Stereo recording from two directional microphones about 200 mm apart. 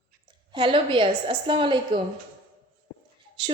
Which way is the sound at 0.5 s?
25° right (ahead or behind).